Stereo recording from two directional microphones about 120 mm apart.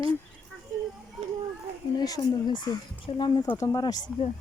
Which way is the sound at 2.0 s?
30° left (ahead or behind).